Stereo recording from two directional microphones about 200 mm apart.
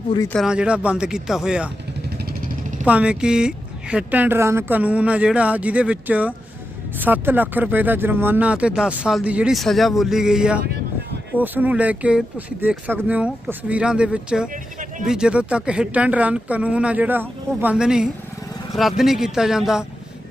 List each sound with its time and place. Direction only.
0.3 s speech: 5° right (ahead or behind)
2.8 s speech: 5° right (ahead or behind)
14.5 s a sound: 40° right (ahead or behind)
15.0 s speech: 5° right (ahead or behind)